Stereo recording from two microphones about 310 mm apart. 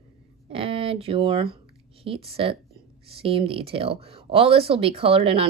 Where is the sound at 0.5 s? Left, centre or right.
Centre.